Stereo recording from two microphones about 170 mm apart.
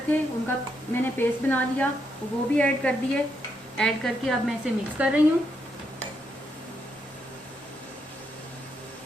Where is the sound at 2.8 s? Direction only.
10° left (ahead or behind).